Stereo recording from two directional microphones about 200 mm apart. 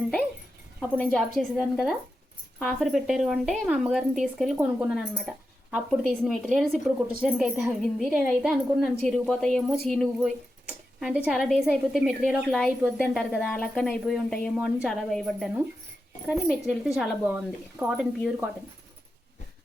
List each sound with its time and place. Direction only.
0.8 s a woman's voice: centre (ahead or behind)
10.2 s a sound: 5° right (ahead or behind)
11.2 s a woman's voice: centre (ahead or behind)